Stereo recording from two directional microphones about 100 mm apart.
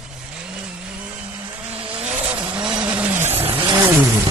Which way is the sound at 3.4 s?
65° right (ahead or behind).